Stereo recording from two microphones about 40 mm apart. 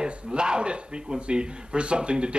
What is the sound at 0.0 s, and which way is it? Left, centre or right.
Speech, right.